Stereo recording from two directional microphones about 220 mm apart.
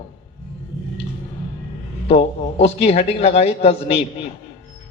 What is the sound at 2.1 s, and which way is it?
A man's voice, 25° left (ahead or behind).